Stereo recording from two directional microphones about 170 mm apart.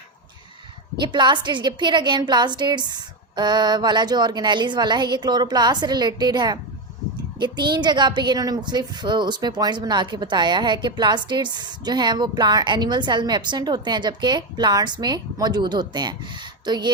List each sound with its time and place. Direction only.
1.0 s a woman's voice: 25° right (ahead or behind)